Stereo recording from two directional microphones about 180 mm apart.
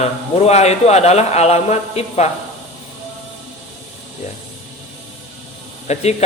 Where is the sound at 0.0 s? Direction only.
35° left (ahead or behind).